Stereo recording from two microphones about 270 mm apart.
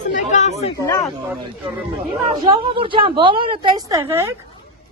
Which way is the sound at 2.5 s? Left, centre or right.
Centre.